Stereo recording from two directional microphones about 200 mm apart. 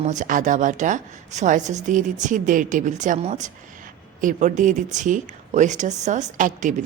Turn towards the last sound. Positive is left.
turn(degrees=-40)  # may be behind; listen again after turning